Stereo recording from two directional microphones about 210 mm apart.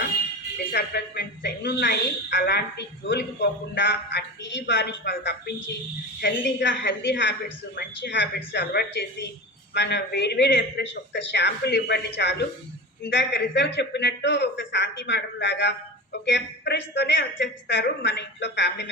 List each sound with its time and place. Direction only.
0.7 s a woman's voice: 50° left (ahead or behind)